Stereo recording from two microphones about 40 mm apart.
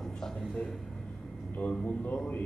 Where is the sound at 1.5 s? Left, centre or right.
Left.